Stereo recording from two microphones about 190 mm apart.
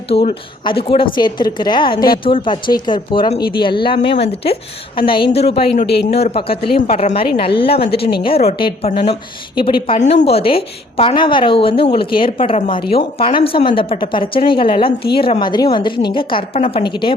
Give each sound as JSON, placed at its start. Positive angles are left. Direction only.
{"t": 0.1, "sound": "a woman's voice", "side_deg": 30}
{"t": 7.9, "sound": "a woman's voice", "side_deg": 55}
{"t": 8.1, "sound": "a woman's voice", "side_deg": 30}